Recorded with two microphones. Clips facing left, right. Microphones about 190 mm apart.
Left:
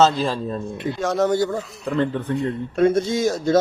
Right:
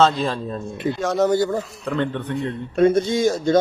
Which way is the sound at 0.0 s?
Centre (ahead or behind).